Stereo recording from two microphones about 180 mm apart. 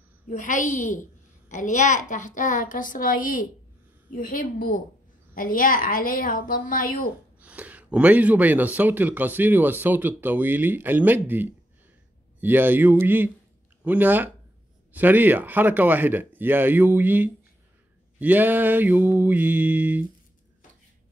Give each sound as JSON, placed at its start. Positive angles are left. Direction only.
{"t": 0.3, "sound": "speech", "side_deg": 45}
{"t": 7.3, "sound": "speech", "side_deg": -10}